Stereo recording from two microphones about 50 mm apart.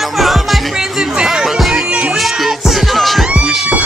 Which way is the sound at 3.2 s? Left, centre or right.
Centre.